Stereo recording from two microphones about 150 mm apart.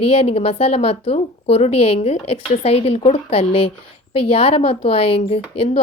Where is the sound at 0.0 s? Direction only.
40° left (ahead or behind).